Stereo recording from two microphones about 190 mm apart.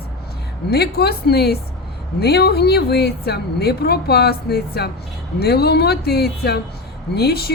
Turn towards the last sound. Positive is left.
turn(degrees=55)  # may be behind; listen again after turning